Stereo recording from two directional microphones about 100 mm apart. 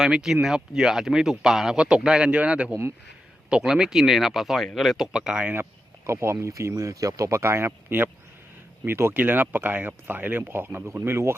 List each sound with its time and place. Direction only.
0.0 s speech: 5° right (ahead or behind)
6.1 s speech: 25° right (ahead or behind)